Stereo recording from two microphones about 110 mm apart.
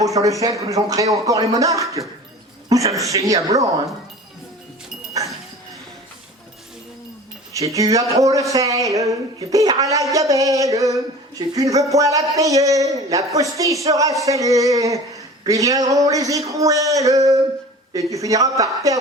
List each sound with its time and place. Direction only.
0.0 s speech: 30° right (ahead or behind)
7.5 s a woman's voice: 30° right (ahead or behind)